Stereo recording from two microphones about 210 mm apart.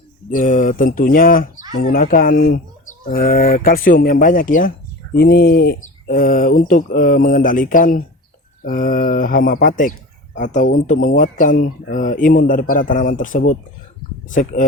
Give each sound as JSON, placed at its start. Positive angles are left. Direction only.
{"t": 0.3, "sound": "speech", "side_deg": 40}